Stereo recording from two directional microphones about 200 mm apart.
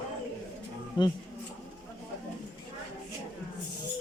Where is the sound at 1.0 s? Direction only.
20° left (ahead or behind).